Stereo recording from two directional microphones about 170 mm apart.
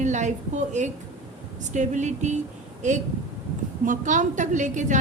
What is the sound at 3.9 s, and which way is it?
A woman's voice, 50° right (ahead or behind).